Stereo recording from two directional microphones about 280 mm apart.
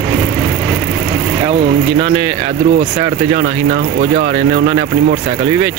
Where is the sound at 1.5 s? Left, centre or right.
Right.